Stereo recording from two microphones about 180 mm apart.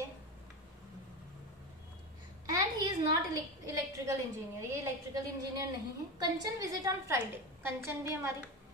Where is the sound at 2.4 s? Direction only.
20° right (ahead or behind).